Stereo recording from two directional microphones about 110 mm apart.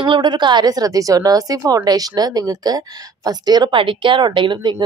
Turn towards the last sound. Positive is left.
turn(degrees=-45)  # may be behind; listen again after turning